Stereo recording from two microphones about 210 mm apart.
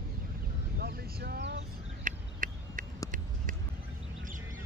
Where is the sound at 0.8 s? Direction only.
45° right (ahead or behind).